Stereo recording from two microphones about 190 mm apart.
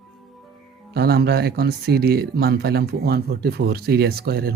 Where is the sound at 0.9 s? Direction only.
55° right (ahead or behind).